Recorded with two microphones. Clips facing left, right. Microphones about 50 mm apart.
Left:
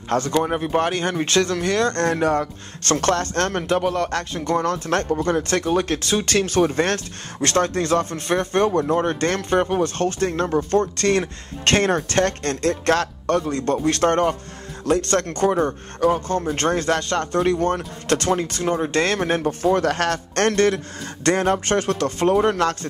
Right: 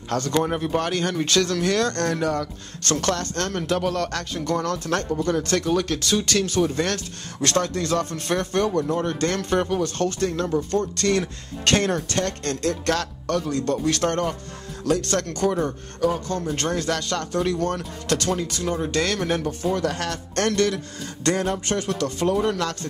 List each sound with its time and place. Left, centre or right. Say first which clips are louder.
0.2 s speech: left 2 dB; centre; by 3.6 s left
3.6 s speech: left 3 dB; left
4.8 s speech: left 3 dB; left
13.7 s speech: left 8 dB; left
16.0 s a man's voice: left 4 dB; left
18.0 s speech: left 4 dB; left
19.7 s speech: left 6 dB; left